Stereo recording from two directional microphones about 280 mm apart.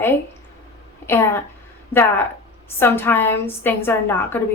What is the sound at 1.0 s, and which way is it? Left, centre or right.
A woman's voice, centre.